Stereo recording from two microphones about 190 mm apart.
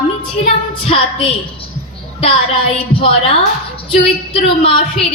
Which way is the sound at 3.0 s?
30° left (ahead or behind).